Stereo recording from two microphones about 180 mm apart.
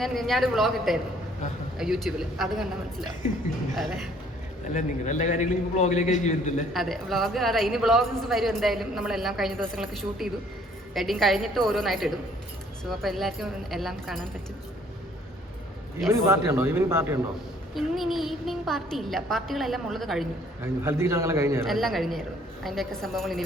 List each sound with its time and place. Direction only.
0.0 s a woman's voice: centre (ahead or behind)
3.8 s a woman's voice: centre (ahead or behind)
4.7 s a man's voice: 45° left (ahead or behind)
6.7 s a woman's voice: centre (ahead or behind)
16.0 s speech: 15° right (ahead or behind)
17.7 s a woman's voice: centre (ahead or behind)
20.8 s speech: 15° right (ahead or behind)
21.7 s a woman's voice: centre (ahead or behind)